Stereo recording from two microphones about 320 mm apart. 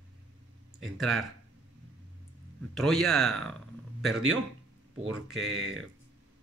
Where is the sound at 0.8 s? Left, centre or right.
Centre.